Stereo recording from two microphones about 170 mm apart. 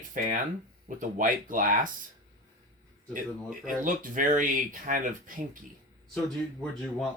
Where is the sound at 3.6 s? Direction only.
50° right (ahead or behind).